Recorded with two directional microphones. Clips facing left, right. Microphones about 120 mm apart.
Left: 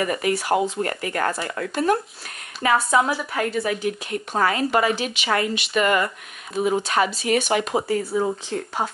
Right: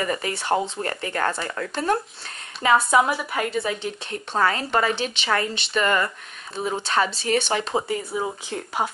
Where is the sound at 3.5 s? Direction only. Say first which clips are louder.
Left 3 dB; 25° right (ahead or behind).